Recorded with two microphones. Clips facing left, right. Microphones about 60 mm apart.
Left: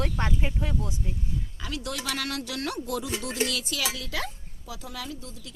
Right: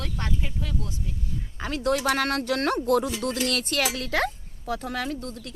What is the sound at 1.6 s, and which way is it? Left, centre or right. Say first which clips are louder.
Speech: right 10 dB; right.